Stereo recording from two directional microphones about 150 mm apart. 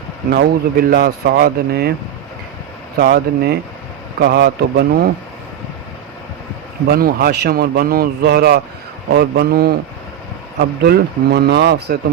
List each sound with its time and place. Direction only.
0.3 s a man's voice: 90° right
3.0 s a man's voice: 90° right
6.8 s a man's voice: 90° right